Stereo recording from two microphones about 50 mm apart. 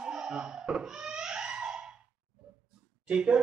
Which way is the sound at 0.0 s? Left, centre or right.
Centre.